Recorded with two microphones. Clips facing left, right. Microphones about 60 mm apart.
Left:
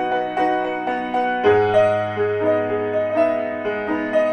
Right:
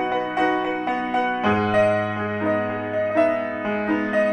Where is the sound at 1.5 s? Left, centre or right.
Right.